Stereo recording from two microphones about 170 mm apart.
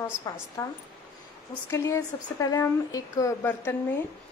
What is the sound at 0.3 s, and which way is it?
Speech, 20° left (ahead or behind).